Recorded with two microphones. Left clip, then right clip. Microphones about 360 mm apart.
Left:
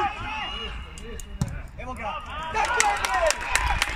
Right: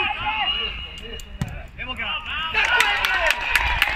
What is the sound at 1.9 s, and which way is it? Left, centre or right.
Speech, centre.